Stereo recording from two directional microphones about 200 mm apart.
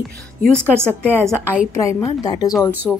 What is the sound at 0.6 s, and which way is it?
Speech, 10° right (ahead or behind).